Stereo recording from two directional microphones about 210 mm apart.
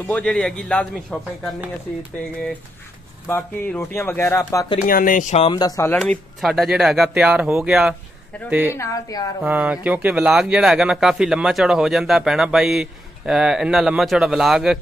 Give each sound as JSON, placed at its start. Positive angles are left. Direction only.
{"t": 0.1, "sound": "speech", "side_deg": 5}
{"t": 3.3, "sound": "speech", "side_deg": 10}
{"t": 4.8, "sound": "speech", "side_deg": 40}
{"t": 5.5, "sound": "a woman's voice", "side_deg": 20}
{"t": 8.7, "sound": "speech", "side_deg": 15}
{"t": 9.4, "sound": "speech", "side_deg": -5}